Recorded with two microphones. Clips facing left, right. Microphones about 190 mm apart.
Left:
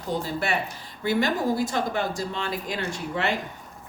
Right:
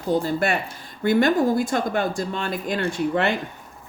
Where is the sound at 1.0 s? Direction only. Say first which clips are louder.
Right 6 dB; 50° right (ahead or behind).